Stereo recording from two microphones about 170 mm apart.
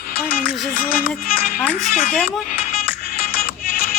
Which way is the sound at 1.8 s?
55° left (ahead or behind).